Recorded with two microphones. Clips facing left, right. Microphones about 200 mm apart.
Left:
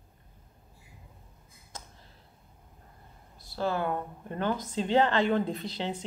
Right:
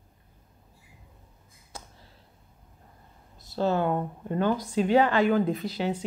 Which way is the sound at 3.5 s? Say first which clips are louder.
Right 5 dB; 20° right (ahead or behind).